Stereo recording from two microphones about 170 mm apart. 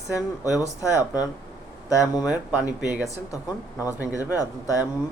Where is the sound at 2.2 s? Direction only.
5° right (ahead or behind).